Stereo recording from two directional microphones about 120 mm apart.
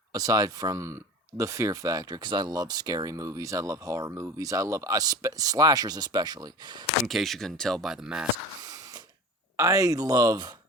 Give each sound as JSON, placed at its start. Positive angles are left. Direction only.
{"t": 0.1, "sound": "speech", "side_deg": -30}
{"t": 7.1, "sound": "speech", "side_deg": 0}
{"t": 8.6, "sound": "a sound", "side_deg": -30}
{"t": 9.6, "sound": "speech", "side_deg": -25}